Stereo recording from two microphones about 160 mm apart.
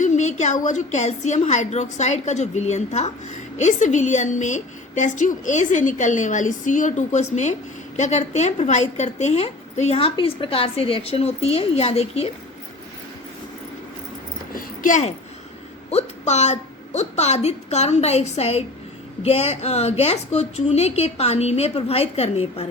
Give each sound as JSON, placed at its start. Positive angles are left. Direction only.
{"t": 0.0, "sound": "a woman's voice", "side_deg": 50}
{"t": 14.5, "sound": "a sound", "side_deg": 55}
{"t": 15.9, "sound": "a woman's voice", "side_deg": 45}